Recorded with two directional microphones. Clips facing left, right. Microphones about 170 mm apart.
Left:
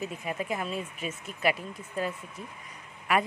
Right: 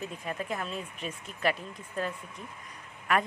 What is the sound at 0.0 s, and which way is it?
A woman's voice, 5° left (ahead or behind).